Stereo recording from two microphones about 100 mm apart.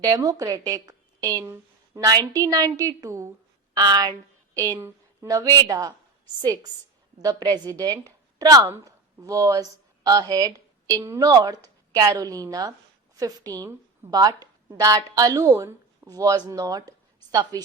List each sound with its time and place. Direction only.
0.0 s a woman's voice: 40° right (ahead or behind)
4.8 s a sound: 20° right (ahead or behind)
5.3 s a woman's voice: 35° right (ahead or behind)